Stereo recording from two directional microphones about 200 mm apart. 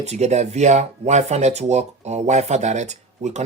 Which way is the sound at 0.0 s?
35° right (ahead or behind).